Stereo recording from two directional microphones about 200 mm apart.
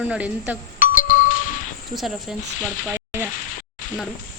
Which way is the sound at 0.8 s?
40° left (ahead or behind).